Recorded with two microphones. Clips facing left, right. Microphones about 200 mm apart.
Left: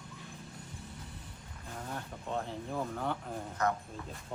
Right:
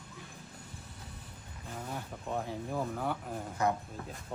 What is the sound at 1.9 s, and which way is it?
Speech, 10° right (ahead or behind).